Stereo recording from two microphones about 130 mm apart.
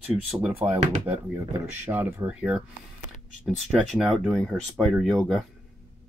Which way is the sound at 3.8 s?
Centre (ahead or behind).